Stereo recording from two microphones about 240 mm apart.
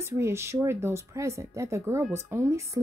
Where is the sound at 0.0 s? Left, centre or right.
Centre.